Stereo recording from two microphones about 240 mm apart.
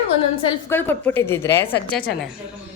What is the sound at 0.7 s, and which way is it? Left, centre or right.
Speech, centre.